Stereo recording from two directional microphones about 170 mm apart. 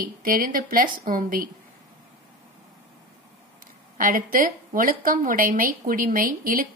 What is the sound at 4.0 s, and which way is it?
Speech, 55° right (ahead or behind).